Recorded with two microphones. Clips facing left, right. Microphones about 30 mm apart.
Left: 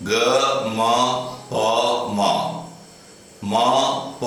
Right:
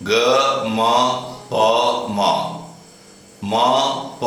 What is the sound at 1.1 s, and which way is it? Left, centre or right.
Mantra, centre.